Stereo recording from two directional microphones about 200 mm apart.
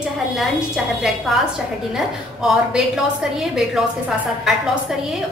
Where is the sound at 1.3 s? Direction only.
Centre (ahead or behind).